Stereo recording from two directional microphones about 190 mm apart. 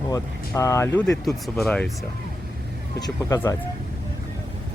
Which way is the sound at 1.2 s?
Centre (ahead or behind).